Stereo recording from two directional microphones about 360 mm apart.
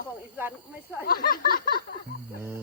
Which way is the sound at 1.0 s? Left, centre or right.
Left.